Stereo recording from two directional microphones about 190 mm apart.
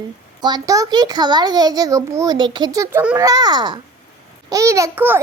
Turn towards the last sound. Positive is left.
turn(degrees=-15)  # may be behind; listen again after turning